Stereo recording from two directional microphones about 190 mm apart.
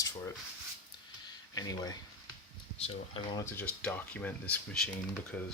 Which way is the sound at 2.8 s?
35° left (ahead or behind).